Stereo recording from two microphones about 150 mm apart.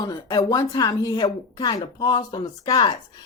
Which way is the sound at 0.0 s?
25° left (ahead or behind).